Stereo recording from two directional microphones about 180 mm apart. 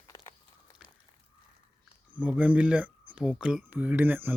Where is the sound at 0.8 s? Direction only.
Centre (ahead or behind).